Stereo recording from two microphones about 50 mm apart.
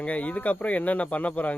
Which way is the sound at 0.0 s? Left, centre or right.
Left.